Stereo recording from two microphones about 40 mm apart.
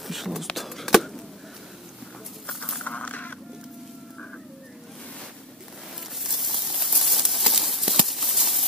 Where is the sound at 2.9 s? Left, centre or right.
Left.